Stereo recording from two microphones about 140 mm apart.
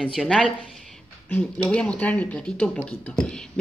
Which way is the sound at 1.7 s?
10° left (ahead or behind).